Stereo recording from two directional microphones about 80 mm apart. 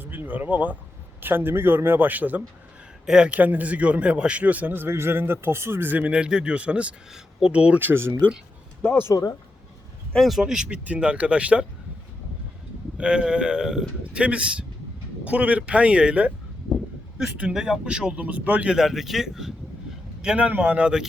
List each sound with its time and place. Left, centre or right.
0.0 s a sound: right
1.2 s a man's voice: right
7.1 s speech: centre
7.5 s a man's voice: centre
9.1 s speech: left
10.1 s a man's voice: centre
13.0 s a man's voice: centre
16.6 s a sound: centre
17.5 s a man's voice: centre
20.2 s a man's voice: centre